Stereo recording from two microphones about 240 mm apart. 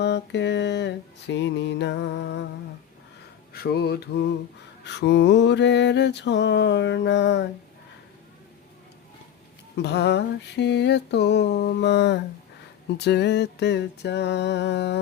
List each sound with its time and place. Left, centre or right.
0.0 s mantra: left
3.5 s a sound: left
4.9 s mantra: left
9.7 s mantra: left